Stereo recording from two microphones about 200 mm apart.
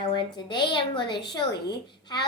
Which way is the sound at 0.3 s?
25° left (ahead or behind).